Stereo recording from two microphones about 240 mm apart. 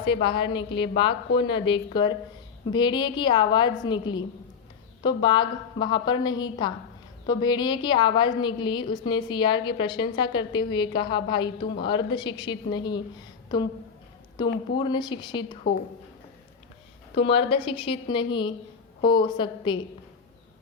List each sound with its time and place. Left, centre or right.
0.0 s a woman's voice: left
14.4 s a woman's voice: centre
15.6 s a woman's voice: left
17.2 s a woman's voice: left